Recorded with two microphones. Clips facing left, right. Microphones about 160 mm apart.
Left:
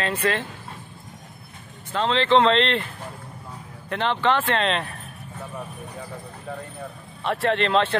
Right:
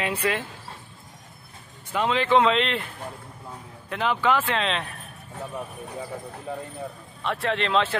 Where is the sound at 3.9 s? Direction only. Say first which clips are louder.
Left 1 dB; 5° right (ahead or behind).